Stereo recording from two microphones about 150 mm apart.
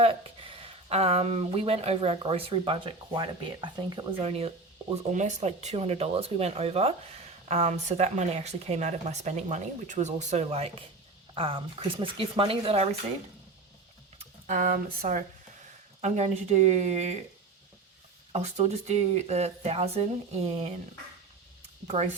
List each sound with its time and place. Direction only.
0.0 s speech: 35° right (ahead or behind)
4.3 s speech: 40° right (ahead or behind)
14.4 s speech: 65° right (ahead or behind)
16.0 s speech: 50° right (ahead or behind)
18.3 s speech: 45° right (ahead or behind)